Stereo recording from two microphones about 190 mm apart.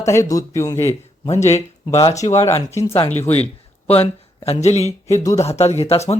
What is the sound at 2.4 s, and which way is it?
Speech, 15° left (ahead or behind).